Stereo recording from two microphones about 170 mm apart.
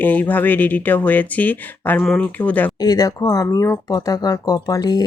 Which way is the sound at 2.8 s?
20° left (ahead or behind).